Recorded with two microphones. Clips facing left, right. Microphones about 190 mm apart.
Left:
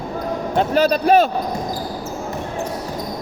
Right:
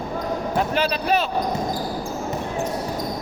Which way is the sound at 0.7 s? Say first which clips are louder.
Left 11 dB; 45° left (ahead or behind).